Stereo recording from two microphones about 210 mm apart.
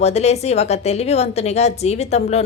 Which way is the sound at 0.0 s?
30° left (ahead or behind).